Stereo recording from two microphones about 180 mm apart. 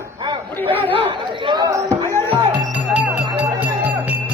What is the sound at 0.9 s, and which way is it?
Speech, 30° right (ahead or behind).